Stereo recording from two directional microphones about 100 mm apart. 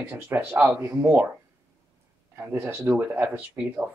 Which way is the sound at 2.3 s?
20° right (ahead or behind).